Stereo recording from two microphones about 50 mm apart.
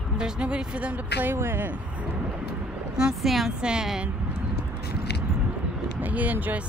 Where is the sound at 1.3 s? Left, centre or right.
Right.